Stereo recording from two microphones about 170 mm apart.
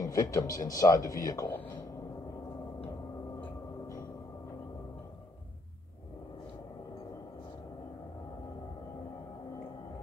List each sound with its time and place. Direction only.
0.0 s speech: 20° left (ahead or behind)
3.3 s gong: 15° left (ahead or behind)